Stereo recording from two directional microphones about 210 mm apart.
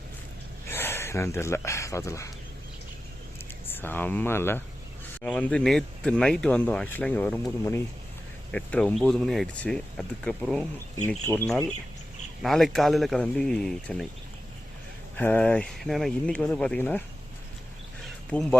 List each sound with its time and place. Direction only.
0.7 s speech: 10° left (ahead or behind)
3.7 s speech: 10° left (ahead or behind)
15.1 s speech: 10° left (ahead or behind)
18.3 s speech: 5° left (ahead or behind)